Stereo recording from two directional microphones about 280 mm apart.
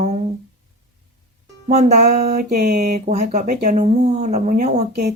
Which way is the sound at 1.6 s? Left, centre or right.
Right.